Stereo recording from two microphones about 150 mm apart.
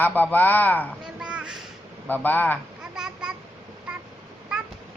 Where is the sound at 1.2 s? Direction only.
5° right (ahead or behind).